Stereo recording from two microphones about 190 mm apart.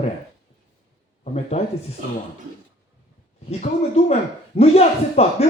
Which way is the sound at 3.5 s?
35° left (ahead or behind).